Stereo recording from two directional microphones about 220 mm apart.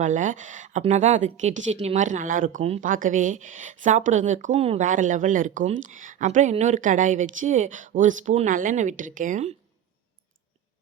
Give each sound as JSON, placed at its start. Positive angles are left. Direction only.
{"t": 0.0, "sound": "a woman's voice", "side_deg": -35}